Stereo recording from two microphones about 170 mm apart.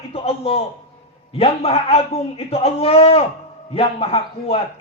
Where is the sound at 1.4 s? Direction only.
35° left (ahead or behind).